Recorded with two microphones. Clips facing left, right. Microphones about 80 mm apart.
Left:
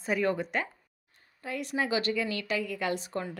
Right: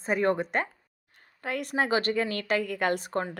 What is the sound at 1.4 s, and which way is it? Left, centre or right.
A woman's voice, right.